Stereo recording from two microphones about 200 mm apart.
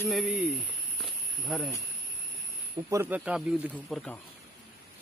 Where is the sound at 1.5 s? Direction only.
Centre (ahead or behind).